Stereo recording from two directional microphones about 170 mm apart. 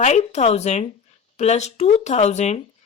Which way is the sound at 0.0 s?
40° left (ahead or behind).